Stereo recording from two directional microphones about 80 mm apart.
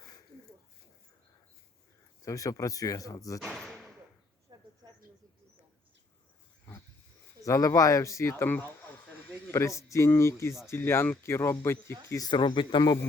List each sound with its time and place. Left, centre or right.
2.2 s speech: left
3.5 s slam: centre
4.5 s a sound: right
7.4 s speech: left
12.1 s speech: left
12.4 s speech: left